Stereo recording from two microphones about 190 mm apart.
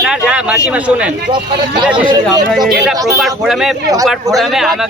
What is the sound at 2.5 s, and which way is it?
Speech, centre (ahead or behind).